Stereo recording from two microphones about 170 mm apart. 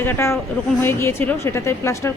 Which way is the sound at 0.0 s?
15° left (ahead or behind).